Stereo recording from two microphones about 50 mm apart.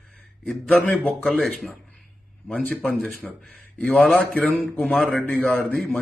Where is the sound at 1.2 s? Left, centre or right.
Centre.